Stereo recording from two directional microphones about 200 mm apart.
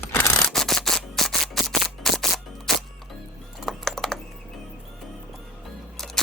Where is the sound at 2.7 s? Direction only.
Centre (ahead or behind).